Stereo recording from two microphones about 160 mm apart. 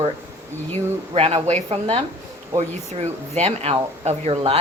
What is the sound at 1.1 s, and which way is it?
Speech, 40° right (ahead or behind).